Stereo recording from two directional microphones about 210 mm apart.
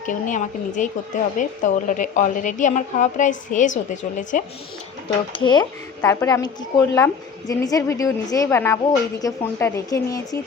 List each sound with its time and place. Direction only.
0.0 s a woman's voice: 35° left (ahead or behind)
5.3 s a woman's voice: 20° left (ahead or behind)